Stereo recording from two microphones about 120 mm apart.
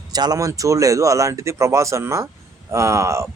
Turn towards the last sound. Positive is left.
turn(degrees=-25)  # may be behind; listen again after turning